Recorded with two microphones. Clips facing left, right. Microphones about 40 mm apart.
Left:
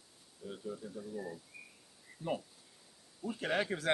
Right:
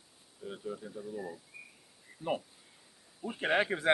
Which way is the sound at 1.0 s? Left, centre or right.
Centre.